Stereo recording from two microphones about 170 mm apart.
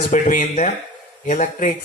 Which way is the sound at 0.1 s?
50° left (ahead or behind).